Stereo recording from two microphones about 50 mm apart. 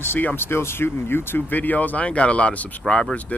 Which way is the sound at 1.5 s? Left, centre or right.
Left.